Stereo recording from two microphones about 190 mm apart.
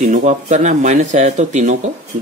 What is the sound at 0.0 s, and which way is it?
Speech, 40° right (ahead or behind).